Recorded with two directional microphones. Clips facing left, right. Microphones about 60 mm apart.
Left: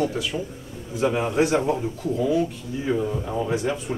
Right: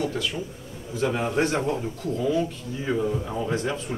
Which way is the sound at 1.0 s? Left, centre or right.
Centre.